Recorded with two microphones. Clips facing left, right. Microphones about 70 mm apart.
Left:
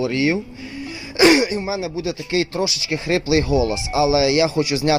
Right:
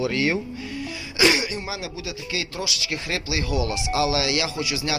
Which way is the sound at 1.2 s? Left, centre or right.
Left.